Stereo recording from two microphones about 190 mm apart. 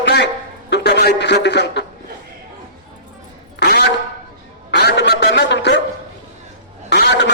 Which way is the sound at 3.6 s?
60° left (ahead or behind).